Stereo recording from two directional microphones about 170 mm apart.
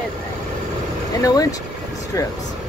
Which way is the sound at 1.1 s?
20° left (ahead or behind).